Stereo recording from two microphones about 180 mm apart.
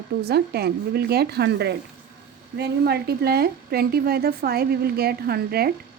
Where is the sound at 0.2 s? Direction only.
60° right (ahead or behind).